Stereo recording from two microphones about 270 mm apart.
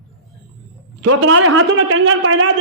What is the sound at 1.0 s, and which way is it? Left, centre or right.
A man's voice, right.